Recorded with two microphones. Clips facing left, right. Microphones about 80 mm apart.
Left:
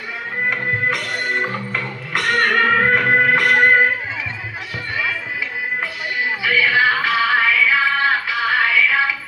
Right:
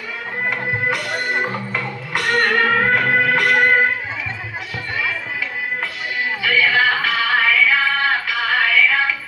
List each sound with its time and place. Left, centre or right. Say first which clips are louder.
0.5 s music: right 1 dB; centre
6.4 s music: even; centre